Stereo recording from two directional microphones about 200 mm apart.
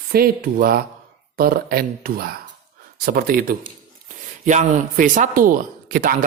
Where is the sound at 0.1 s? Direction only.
45° right (ahead or behind).